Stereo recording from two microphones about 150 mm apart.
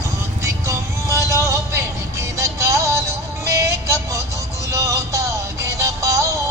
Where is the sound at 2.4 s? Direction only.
20° right (ahead or behind).